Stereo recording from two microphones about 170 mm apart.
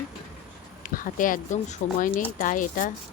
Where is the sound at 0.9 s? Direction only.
50° left (ahead or behind).